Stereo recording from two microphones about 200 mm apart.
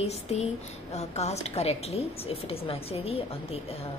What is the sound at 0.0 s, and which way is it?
Speech, 30° left (ahead or behind).